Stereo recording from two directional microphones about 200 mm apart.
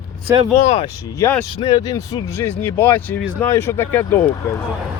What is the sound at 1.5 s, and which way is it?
Speech, 20° left (ahead or behind).